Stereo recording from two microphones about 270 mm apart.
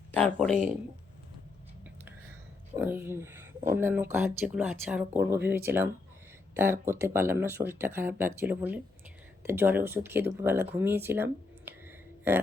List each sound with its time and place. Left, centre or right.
0.1 s speech: centre
2.7 s speech: centre